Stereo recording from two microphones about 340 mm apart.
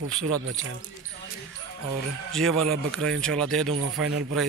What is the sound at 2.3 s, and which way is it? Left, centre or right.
Speech, centre.